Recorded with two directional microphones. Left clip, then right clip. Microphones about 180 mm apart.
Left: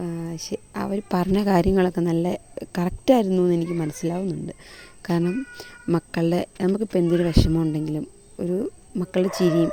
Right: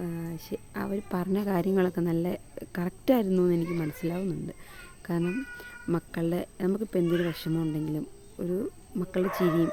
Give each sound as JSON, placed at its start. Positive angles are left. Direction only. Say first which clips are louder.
{"t": 0.0, "sound": "a woman's voice", "louder": "left 6 dB", "side_deg": 35}
{"t": 3.6, "sound": "a child's voice", "louder": "left 5 dB", "side_deg": 0}
{"t": 4.3, "sound": "speech", "louder": "left 5 dB", "side_deg": 25}
{"t": 5.2, "sound": "a child's voice", "louder": "left 5 dB", "side_deg": 0}
{"t": 5.9, "sound": "a woman's voice", "louder": "left 7 dB", "side_deg": 35}
{"t": 7.0, "sound": "a child's voice", "louder": "left 6 dB", "side_deg": 0}
{"t": 7.3, "sound": "a woman's voice", "louder": "left 9 dB", "side_deg": 35}
{"t": 7.9, "sound": "speech", "louder": "left 5 dB", "side_deg": 20}